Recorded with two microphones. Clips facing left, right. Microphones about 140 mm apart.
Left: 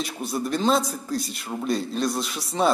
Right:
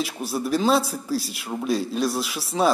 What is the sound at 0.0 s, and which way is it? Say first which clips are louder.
A man's voice: right 1 dB; 5° right (ahead or behind).